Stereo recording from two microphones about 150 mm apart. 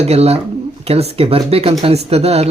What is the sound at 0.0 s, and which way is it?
Speech, 45° right (ahead or behind).